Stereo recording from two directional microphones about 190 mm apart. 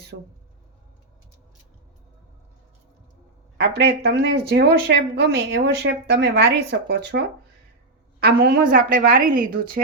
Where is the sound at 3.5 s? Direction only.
60° right (ahead or behind).